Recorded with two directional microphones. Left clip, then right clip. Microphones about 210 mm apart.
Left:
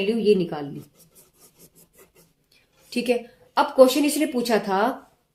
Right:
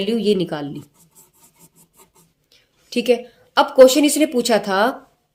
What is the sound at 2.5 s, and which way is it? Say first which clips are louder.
A woman's voice: right 6 dB; 35° right (ahead or behind).